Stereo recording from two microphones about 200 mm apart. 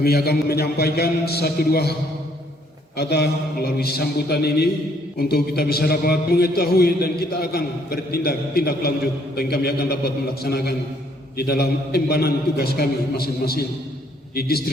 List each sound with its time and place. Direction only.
0.0 s a man's voice: 50° left (ahead or behind)
3.0 s a man's voice: 55° left (ahead or behind)